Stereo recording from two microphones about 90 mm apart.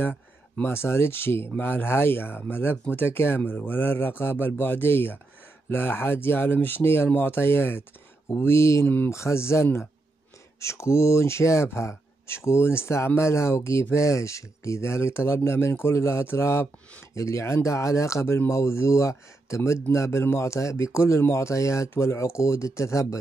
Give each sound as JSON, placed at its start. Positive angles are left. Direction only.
{"t": 0.0, "sound": "speech", "side_deg": 20}
{"t": 8.8, "sound": "speech", "side_deg": 20}
{"t": 9.1, "sound": "a man's voice", "side_deg": 30}